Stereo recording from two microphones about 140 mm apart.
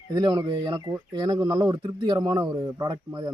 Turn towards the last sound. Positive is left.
turn(degrees=-30)  # may be behind; listen again after turning